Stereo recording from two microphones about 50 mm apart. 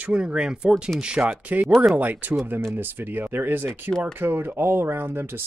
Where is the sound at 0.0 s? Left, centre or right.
Right.